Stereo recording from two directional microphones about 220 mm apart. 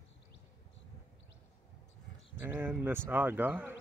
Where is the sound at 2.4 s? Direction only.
10° right (ahead or behind).